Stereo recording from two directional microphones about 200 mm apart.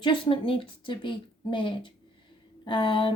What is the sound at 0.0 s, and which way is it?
Speech, 25° left (ahead or behind).